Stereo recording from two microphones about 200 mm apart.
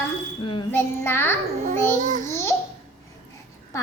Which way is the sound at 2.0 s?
40° right (ahead or behind).